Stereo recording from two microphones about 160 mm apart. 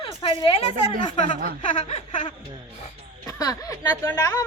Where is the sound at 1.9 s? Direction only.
45° left (ahead or behind).